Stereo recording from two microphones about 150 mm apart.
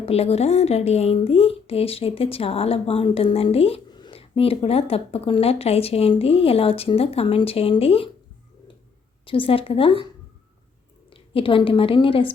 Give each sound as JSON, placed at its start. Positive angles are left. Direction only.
{"t": 0.0, "sound": "a woman's voice", "side_deg": 40}
{"t": 9.2, "sound": "a woman's voice", "side_deg": 35}
{"t": 11.1, "sound": "a woman's voice", "side_deg": 35}